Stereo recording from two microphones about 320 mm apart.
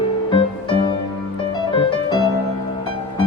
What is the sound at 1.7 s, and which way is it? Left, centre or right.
Music, centre.